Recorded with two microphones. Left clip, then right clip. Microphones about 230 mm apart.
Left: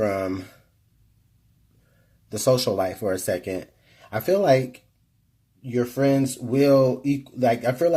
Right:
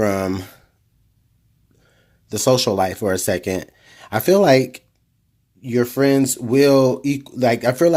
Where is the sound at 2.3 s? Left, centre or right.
Right.